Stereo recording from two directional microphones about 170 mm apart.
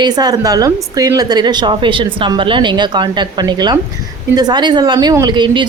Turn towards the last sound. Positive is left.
turn(degrees=-25)  # may be behind; listen again after turning